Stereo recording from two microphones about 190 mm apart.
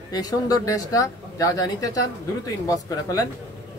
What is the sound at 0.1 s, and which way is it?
Speech, 20° left (ahead or behind).